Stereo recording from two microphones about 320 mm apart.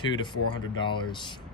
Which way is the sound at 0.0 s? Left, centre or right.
Centre.